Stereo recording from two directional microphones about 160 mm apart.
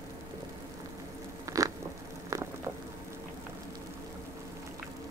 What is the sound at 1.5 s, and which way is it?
Biting, 20° right (ahead or behind).